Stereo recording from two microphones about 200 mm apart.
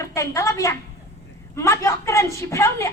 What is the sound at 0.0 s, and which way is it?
A woman's voice, 15° left (ahead or behind).